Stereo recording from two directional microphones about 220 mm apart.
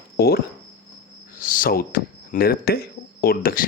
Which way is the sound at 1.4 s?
40° left (ahead or behind).